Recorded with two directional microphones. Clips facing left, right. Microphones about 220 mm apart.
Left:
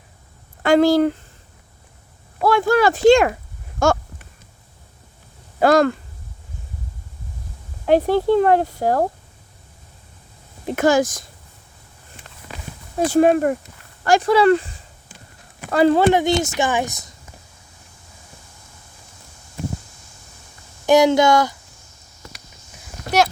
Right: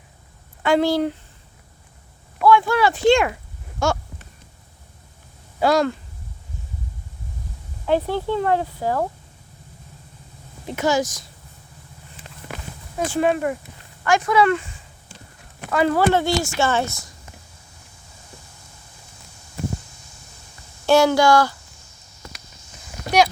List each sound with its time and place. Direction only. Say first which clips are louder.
0.6 s speech: left 4 dB; 45° left (ahead or behind)
2.4 s speech: left 1 dB; 40° left (ahead or behind)
5.5 s speech: left 4 dB; 50° left (ahead or behind)
7.9 s speech: left 6 dB; 40° left (ahead or behind)
8.4 s speech: left 5 dB; 55° left (ahead or behind)
10.8 s speech: left 4 dB; 50° left (ahead or behind)
13.1 s speech: left 6 dB; 45° left (ahead or behind)
16.0 s speech: left 3 dB; 20° left (ahead or behind)
20.8 s speech: left 2 dB; 15° left (ahead or behind)